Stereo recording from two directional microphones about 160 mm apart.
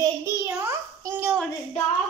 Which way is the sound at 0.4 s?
15° right (ahead or behind).